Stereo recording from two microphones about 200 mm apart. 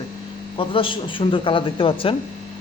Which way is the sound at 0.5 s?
25° left (ahead or behind).